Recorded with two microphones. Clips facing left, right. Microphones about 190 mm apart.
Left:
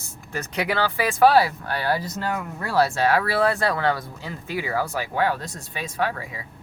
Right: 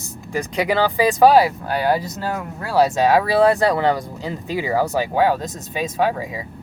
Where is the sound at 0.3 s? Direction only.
15° right (ahead or behind).